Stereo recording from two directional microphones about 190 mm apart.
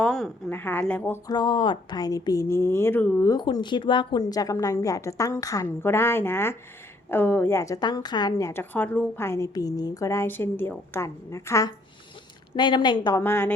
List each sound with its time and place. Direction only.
0.0 s a woman's voice: centre (ahead or behind)
1.3 s a woman's voice: 25° left (ahead or behind)